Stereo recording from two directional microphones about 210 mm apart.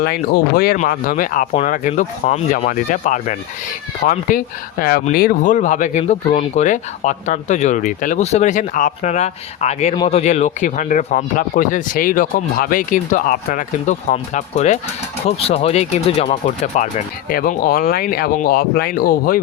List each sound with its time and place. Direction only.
0.0 s speech: 45° left (ahead or behind)